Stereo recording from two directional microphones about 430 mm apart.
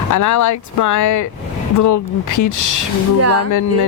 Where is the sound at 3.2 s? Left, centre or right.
Right.